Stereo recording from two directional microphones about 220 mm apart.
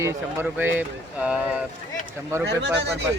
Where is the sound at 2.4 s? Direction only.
50° right (ahead or behind).